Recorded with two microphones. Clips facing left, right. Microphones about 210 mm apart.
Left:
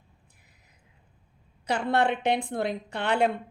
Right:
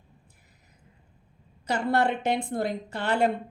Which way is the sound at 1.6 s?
60° left (ahead or behind).